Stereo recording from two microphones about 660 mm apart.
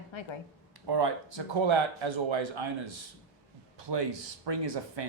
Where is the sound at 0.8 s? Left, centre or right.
Right.